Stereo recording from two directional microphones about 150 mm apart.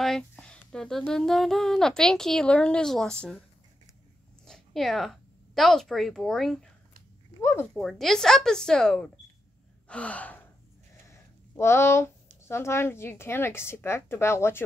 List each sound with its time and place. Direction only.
0.0 s speech: 5° left (ahead or behind)
4.5 s a woman's voice: centre (ahead or behind)
7.7 s speech: centre (ahead or behind)
9.8 s gasp: 10° left (ahead or behind)
11.5 s a woman's voice: 15° left (ahead or behind)